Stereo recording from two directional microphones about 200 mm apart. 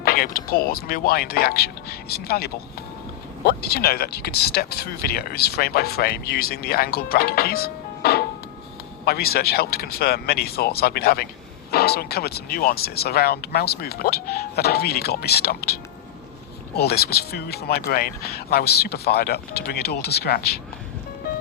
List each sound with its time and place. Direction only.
0.0 s speech: 50° left (ahead or behind)